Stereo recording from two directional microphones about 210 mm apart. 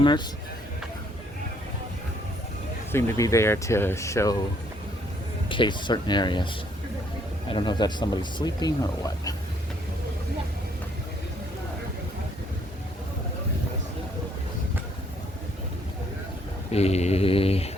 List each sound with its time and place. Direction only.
2.9 s speech: 15° left (ahead or behind)
5.5 s speech: 20° left (ahead or behind)
7.5 s speech: 20° left (ahead or behind)
16.7 s speech: 30° left (ahead or behind)